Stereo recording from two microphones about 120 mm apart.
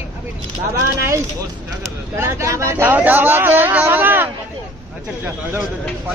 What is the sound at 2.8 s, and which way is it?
Speech, 15° right (ahead or behind).